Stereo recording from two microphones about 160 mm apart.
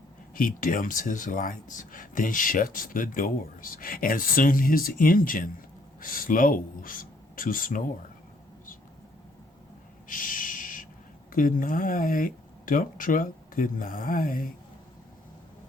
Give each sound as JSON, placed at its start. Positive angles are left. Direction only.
{"t": 0.3, "sound": "speech", "side_deg": 60}
{"t": 10.1, "sound": "a sound", "side_deg": 55}
{"t": 11.3, "sound": "speech", "side_deg": 60}